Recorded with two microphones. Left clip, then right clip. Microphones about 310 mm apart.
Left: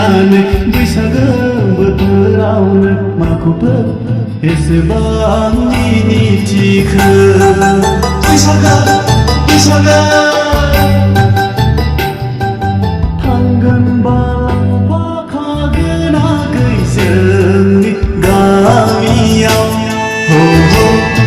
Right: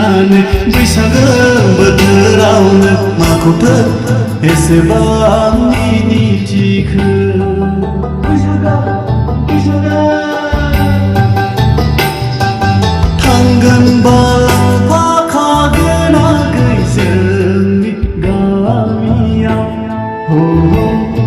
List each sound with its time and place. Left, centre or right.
0.0 s music: centre
0.7 s music: centre; by 2.9 s right
4.9 s music: centre
6.6 s music: centre
13.2 s music: right
14.0 s music: right
16.0 s music: centre
18.3 s music: left
20.3 s music: left